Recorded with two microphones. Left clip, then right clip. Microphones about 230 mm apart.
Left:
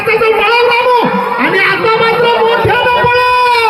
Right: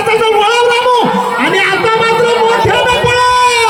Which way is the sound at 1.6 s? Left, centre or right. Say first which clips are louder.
Left 1 dB; right.